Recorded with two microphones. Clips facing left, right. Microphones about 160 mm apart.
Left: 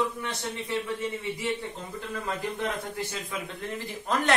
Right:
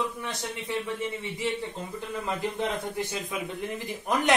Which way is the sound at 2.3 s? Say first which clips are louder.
Right 2 dB; 20° right (ahead or behind).